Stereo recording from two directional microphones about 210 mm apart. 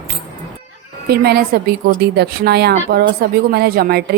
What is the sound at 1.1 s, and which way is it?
A woman's voice, 50° right (ahead or behind).